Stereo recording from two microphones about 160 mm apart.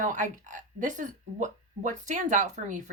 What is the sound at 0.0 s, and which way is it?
Speech, 50° right (ahead or behind).